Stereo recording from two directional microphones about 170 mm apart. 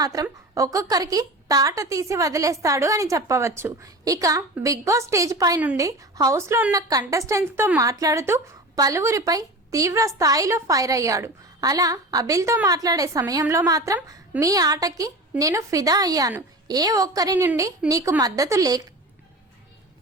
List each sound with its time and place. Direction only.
0.0 s a woman's voice: 20° right (ahead or behind)